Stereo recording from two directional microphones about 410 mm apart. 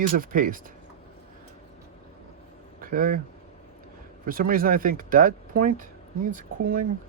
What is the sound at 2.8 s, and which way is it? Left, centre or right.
Speech, centre.